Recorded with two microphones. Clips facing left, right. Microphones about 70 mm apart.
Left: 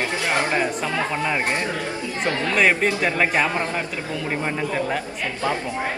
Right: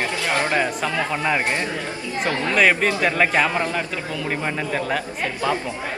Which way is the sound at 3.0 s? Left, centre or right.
Centre.